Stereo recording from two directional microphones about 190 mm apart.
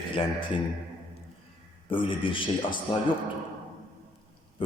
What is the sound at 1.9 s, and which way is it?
Speech, 25° left (ahead or behind).